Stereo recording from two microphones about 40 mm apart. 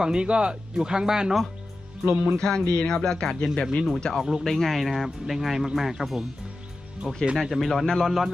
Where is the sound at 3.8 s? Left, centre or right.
Centre.